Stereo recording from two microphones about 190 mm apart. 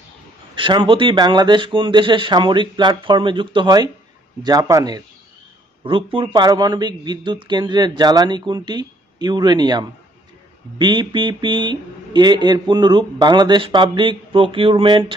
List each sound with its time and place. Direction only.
0.6 s speech: 25° right (ahead or behind)